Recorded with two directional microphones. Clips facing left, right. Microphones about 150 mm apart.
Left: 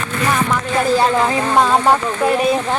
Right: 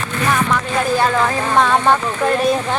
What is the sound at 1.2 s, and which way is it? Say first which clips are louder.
Speech: left 1 dB; 10° left (ahead or behind).